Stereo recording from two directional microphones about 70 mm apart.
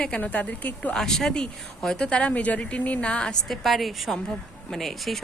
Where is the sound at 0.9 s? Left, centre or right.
Centre.